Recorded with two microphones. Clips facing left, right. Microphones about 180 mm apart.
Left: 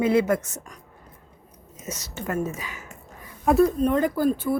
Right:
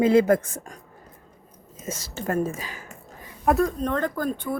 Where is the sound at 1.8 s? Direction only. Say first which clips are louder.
Right 2 dB; 30° right (ahead or behind).